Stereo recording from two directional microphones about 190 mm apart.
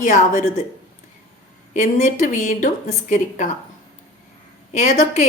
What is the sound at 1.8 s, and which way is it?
A woman's voice, 40° left (ahead or behind).